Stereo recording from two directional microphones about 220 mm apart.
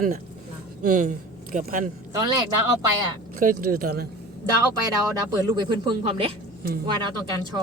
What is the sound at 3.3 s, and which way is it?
Speech, 40° right (ahead or behind).